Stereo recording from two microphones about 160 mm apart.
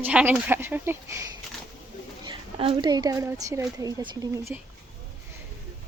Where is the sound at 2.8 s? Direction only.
25° right (ahead or behind).